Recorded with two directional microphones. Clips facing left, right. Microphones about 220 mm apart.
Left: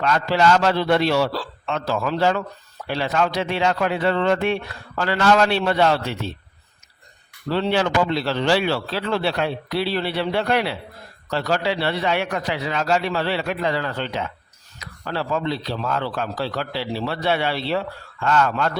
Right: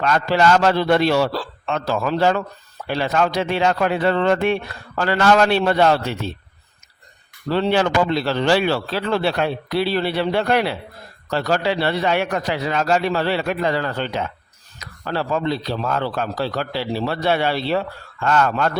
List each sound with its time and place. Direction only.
0.0 s a man's voice: 50° right (ahead or behind)
7.5 s a man's voice: 45° right (ahead or behind)